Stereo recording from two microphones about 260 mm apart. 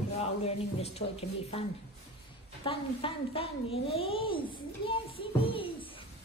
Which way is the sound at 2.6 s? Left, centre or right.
Left.